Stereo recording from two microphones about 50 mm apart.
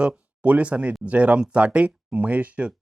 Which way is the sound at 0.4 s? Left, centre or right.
Right.